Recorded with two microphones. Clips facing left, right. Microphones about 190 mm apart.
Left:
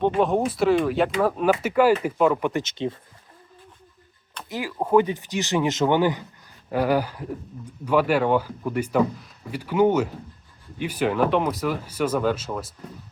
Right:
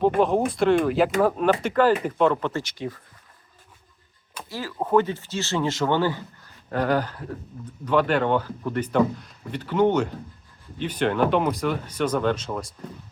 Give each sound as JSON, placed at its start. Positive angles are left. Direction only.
{"t": 0.2, "sound": "speech", "side_deg": 0}
{"t": 4.4, "sound": "speech", "side_deg": 15}